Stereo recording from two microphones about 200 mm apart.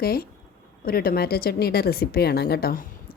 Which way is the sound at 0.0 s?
50° left (ahead or behind).